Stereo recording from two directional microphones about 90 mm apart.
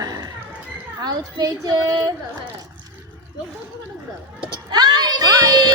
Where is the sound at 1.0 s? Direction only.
45° right (ahead or behind).